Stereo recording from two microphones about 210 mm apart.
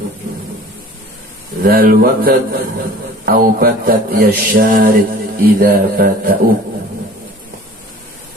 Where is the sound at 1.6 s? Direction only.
45° right (ahead or behind).